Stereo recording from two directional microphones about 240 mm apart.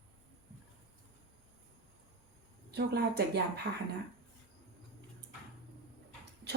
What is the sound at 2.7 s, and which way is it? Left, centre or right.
Speech, right.